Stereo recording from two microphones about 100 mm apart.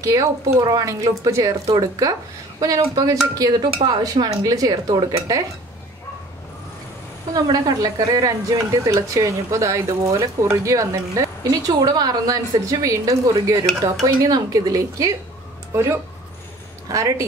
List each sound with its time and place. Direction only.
0.0 s a woman's voice: 30° right (ahead or behind)
7.3 s a woman's voice: 40° right (ahead or behind)